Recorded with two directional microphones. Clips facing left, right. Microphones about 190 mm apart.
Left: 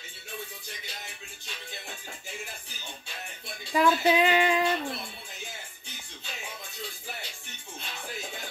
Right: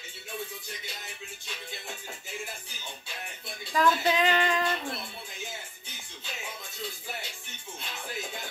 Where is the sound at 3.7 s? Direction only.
10° left (ahead or behind).